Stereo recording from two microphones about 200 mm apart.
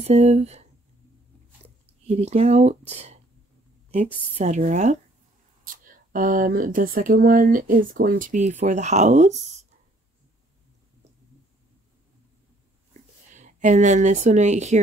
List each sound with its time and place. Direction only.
0.0 s speech: 35° right (ahead or behind)
2.0 s speech: 35° right (ahead or behind)
13.3 s speech: 35° right (ahead or behind)